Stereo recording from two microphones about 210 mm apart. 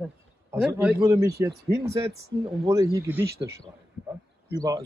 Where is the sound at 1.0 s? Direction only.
15° right (ahead or behind).